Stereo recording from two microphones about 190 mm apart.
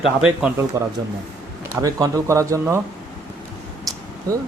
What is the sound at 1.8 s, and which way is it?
A man's voice, 15° right (ahead or behind).